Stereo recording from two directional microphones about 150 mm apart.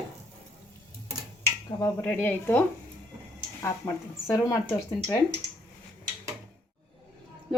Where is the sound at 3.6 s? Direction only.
20° left (ahead or behind).